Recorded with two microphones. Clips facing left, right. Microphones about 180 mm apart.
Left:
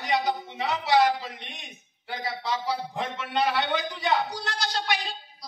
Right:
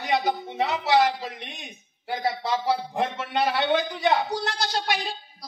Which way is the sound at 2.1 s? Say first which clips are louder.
Right 5 dB; 55° right (ahead or behind).